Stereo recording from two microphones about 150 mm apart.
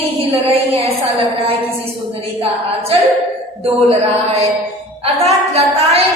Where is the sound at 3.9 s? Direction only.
45° right (ahead or behind).